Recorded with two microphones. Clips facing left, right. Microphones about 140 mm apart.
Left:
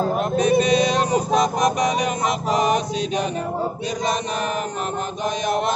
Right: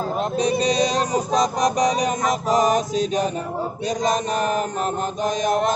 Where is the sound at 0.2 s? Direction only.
30° right (ahead or behind).